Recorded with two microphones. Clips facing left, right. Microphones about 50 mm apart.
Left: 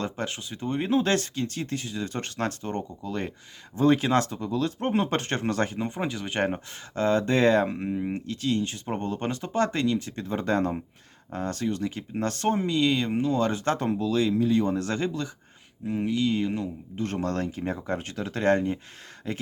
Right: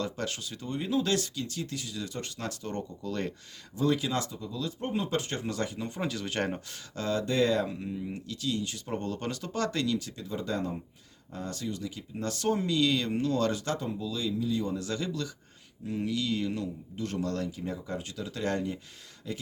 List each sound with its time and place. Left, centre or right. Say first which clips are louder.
0.0 s speech: left 2 dB; left
0.7 s speech: left 5 dB; left
2.1 s speech: left 7 dB; left
3.0 s speech: left 2 dB; centre
3.8 s speech: left 7 dB; left
13.7 s speech: left 9 dB; left